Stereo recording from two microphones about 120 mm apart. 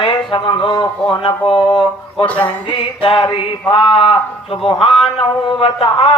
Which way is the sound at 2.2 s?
10° left (ahead or behind).